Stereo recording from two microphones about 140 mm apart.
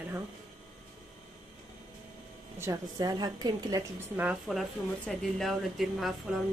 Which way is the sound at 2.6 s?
25° right (ahead or behind).